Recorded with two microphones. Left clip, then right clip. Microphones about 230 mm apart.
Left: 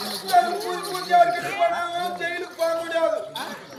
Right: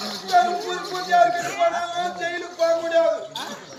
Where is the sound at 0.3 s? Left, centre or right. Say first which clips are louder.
Right 1 dB; centre.